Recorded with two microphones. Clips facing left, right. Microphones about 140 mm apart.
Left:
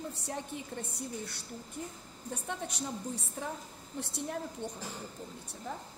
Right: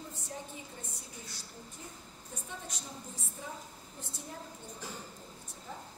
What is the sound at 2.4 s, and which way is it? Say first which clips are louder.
A woman's voice: left 8 dB; 65° left (ahead or behind).